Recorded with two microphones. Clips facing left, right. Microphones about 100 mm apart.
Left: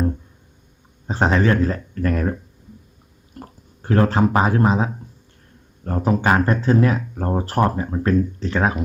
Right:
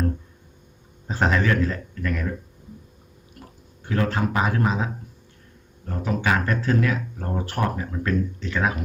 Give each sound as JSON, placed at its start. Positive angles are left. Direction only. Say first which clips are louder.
{"t": 1.0, "sound": "speech", "louder": "left 4 dB", "side_deg": 30}
{"t": 3.4, "sound": "a sound", "louder": "left 7 dB", "side_deg": 35}
{"t": 3.8, "sound": "speech", "louder": "left 7 dB", "side_deg": 35}
{"t": 6.0, "sound": "speech", "louder": "left 5 dB", "side_deg": 40}